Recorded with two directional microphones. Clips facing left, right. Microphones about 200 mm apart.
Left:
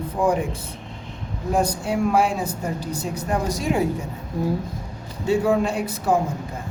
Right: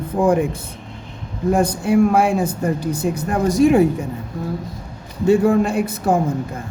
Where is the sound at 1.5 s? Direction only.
50° right (ahead or behind).